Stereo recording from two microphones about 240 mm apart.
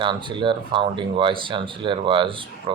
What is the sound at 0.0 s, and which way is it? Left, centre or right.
Speech, centre.